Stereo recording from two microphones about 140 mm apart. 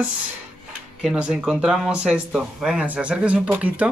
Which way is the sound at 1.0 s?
5° right (ahead or behind).